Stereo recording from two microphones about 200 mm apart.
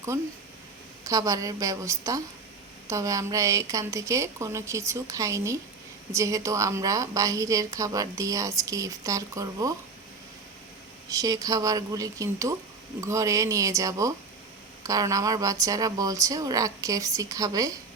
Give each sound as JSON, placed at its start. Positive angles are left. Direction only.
{"t": 0.1, "sound": "a woman's voice", "side_deg": -15}
{"t": 11.1, "sound": "a woman's voice", "side_deg": -15}